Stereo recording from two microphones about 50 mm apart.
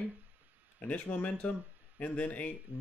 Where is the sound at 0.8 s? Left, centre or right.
Left.